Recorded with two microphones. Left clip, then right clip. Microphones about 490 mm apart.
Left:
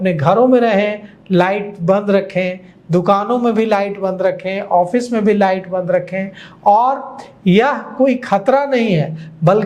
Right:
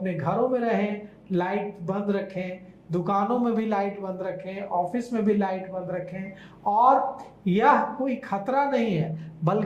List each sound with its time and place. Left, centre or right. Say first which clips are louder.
0.0 s a man's voice: left 13 dB; left
7.4 s a man's voice: left 6 dB; left
9.4 s speech: left 13 dB; left